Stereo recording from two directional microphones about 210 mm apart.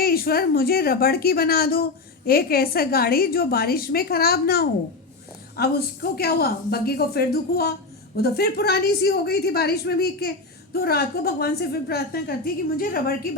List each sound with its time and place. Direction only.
0.0 s a woman's voice: 45° left (ahead or behind)